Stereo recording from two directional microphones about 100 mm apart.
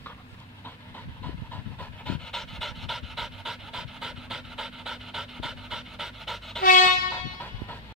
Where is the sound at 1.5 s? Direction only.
15° left (ahead or behind).